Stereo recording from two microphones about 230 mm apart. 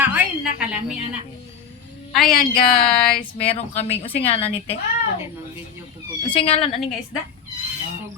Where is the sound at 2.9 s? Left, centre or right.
Centre.